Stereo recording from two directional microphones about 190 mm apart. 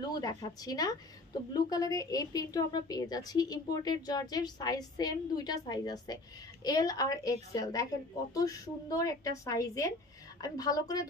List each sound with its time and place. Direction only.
0.2 s a woman's voice: 20° left (ahead or behind)